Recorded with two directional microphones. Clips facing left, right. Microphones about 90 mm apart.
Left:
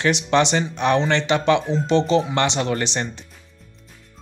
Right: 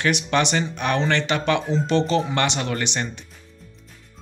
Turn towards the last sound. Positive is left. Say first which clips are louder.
# left 3 dB
turn(degrees=30)  # may be behind; listen again after turning